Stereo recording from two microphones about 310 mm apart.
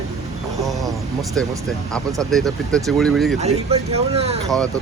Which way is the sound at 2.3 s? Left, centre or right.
Centre.